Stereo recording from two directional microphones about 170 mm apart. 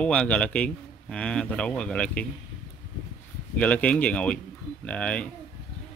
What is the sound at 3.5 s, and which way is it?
Speech, 10° left (ahead or behind).